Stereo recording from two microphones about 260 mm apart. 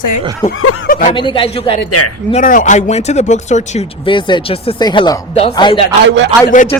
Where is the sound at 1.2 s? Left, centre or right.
Centre.